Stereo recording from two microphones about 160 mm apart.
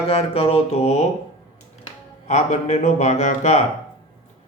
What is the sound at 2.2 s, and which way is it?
Speech, 45° left (ahead or behind).